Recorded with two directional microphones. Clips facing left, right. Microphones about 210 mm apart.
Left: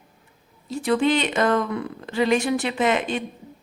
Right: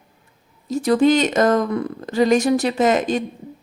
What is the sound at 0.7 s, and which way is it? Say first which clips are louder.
Speech: right 5 dB; 40° right (ahead or behind).